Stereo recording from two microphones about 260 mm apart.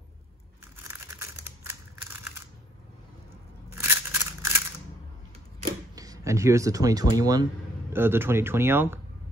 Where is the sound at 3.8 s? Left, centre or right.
Centre.